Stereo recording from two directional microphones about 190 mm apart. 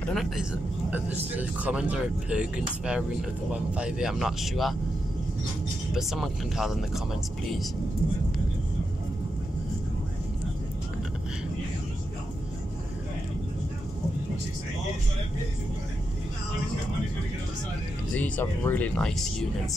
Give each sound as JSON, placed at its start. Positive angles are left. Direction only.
{"t": 0.0, "sound": "speech", "side_deg": 0}
{"t": 5.9, "sound": "speech", "side_deg": 0}
{"t": 18.1, "sound": "speech", "side_deg": 5}